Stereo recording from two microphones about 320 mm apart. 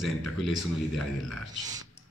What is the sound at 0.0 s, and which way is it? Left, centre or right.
Speech, centre.